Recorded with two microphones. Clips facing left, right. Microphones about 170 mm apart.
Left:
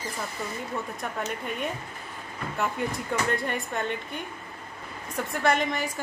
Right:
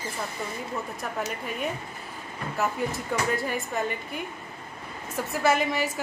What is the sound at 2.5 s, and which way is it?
A woman's voice, centre (ahead or behind).